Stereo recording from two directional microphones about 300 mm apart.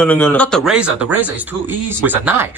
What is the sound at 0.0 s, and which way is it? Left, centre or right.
Speech, centre.